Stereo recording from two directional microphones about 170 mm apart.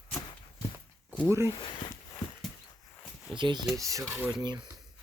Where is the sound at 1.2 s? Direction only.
15° right (ahead or behind).